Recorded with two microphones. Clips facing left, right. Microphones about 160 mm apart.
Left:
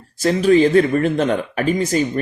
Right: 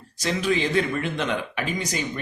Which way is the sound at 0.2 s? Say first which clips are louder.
Left 11 dB; 40° left (ahead or behind).